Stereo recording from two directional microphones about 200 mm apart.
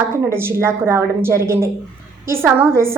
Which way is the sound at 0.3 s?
10° right (ahead or behind).